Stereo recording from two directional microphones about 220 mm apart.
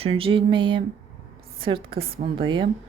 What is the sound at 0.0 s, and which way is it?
Speech, 25° right (ahead or behind).